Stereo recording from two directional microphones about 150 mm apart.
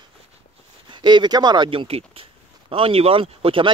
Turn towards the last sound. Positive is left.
turn(degrees=-35)  # may be behind; listen again after turning